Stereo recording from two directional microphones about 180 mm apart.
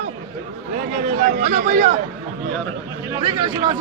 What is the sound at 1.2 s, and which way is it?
Speech, 40° right (ahead or behind).